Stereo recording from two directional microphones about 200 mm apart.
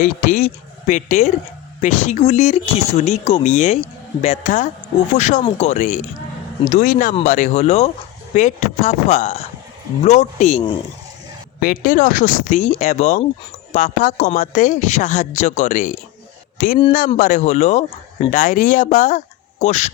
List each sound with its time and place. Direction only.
0.0 s speech: 40° left (ahead or behind)
11.6 s speech: 45° left (ahead or behind)